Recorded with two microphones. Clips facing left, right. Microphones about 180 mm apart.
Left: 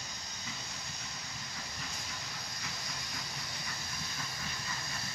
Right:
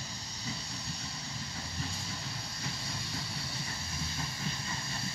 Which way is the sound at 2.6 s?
30° right (ahead or behind).